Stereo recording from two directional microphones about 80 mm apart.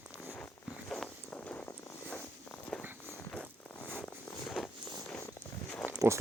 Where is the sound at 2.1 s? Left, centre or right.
Centre.